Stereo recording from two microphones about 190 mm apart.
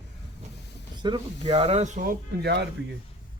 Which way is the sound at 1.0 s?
25° right (ahead or behind).